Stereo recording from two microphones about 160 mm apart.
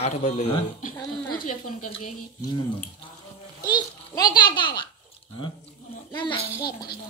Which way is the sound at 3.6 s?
25° left (ahead or behind).